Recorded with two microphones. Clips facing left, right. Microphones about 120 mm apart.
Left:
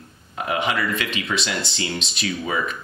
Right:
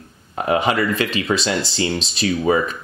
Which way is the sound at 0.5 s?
35° right (ahead or behind).